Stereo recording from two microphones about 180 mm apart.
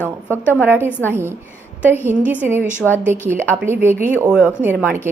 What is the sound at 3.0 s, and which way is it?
Speech, 10° right (ahead or behind).